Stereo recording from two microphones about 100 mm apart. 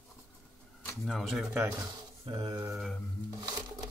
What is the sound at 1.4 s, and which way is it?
Speech, 10° right (ahead or behind).